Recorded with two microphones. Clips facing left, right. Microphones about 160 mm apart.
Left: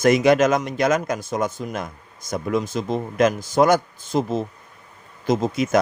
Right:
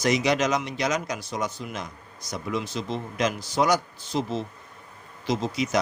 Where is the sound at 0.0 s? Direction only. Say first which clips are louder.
Left 7 dB; 50° left (ahead or behind).